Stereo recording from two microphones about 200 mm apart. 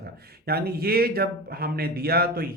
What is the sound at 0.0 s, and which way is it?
Speech, 50° right (ahead or behind).